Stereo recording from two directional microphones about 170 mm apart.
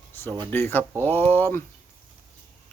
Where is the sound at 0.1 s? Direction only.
10° left (ahead or behind).